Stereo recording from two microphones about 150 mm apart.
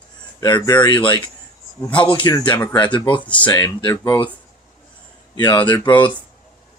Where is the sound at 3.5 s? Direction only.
25° left (ahead or behind).